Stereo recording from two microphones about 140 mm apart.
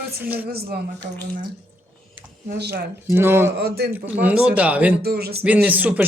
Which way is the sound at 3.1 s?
15° right (ahead or behind).